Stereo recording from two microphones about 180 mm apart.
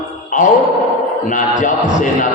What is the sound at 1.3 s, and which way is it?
Speech, 45° left (ahead or behind).